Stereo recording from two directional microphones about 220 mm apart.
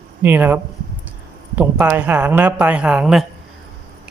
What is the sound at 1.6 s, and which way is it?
Speech, 5° right (ahead or behind).